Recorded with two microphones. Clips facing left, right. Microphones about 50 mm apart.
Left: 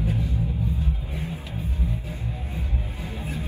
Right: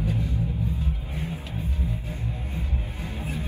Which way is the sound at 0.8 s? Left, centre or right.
Right.